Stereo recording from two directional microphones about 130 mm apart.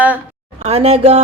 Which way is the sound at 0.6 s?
55° right (ahead or behind).